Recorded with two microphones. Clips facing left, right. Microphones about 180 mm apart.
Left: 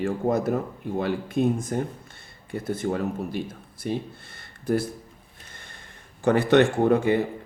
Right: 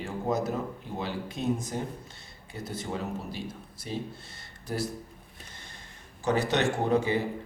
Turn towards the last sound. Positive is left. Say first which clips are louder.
# left 5 dB
turn(degrees=55)  # may be behind; listen again after turning